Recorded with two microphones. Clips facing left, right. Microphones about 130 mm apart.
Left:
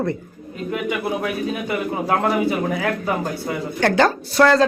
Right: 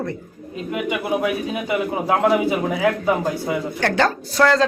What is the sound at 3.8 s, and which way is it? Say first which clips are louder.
Speech: left 5 dB; 15° left (ahead or behind).